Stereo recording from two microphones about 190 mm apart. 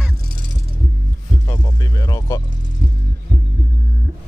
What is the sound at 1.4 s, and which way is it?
Music, 20° left (ahead or behind).